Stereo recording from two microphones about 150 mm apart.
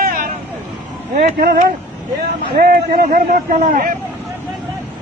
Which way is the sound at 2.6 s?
80° right.